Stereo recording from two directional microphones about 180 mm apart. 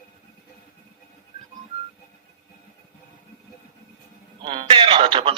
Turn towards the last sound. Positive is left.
turn(degrees=-30)  # may be behind; listen again after turning